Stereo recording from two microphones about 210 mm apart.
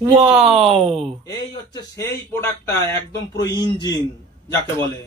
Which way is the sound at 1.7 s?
15° left (ahead or behind).